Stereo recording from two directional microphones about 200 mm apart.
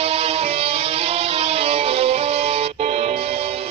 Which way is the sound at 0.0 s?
30° right (ahead or behind).